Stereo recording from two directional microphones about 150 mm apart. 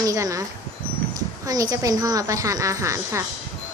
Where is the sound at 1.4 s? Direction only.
25° right (ahead or behind).